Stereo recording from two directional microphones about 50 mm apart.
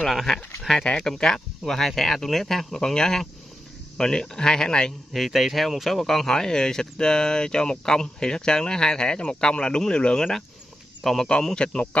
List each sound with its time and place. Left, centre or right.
0.6 s speech: centre
5.1 s speech: centre
11.0 s speech: centre
11.5 s a man's voice: centre